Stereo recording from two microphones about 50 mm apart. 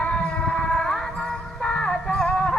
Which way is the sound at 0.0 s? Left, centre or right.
Left.